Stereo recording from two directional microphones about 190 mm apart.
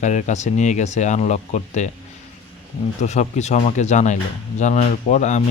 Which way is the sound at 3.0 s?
35° left (ahead or behind).